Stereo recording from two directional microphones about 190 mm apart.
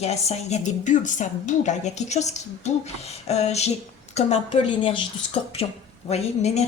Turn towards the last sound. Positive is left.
turn(degrees=35)  # may be behind; listen again after turning